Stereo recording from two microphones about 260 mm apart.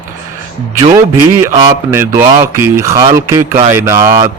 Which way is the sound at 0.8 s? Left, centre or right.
Right.